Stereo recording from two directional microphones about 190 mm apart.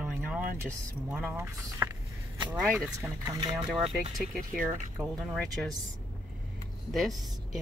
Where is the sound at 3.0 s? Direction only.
20° right (ahead or behind).